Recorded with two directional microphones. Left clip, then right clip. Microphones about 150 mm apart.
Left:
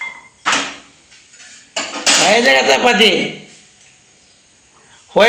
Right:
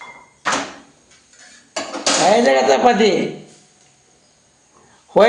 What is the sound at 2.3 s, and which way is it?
Speech, 25° right (ahead or behind).